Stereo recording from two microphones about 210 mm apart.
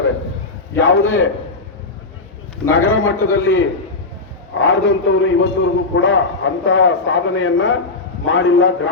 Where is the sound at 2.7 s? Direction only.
75° left (ahead or behind).